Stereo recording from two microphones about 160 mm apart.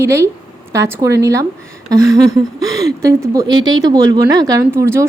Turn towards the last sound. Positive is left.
turn(degrees=-20)  # may be behind; listen again after turning